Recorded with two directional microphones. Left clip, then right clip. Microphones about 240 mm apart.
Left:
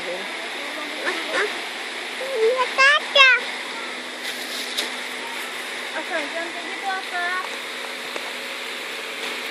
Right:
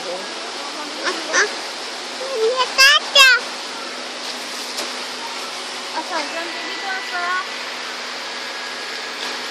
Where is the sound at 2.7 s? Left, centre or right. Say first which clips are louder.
Right 4 dB; right.